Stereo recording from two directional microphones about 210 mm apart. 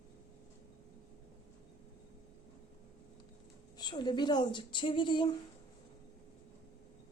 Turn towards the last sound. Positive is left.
turn(degrees=25)  # may be behind; listen again after turning